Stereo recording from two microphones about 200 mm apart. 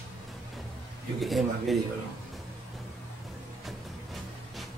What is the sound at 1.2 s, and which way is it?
Speech, centre (ahead or behind).